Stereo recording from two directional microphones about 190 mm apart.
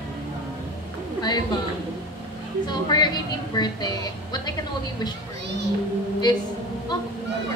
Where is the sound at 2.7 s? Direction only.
20° left (ahead or behind).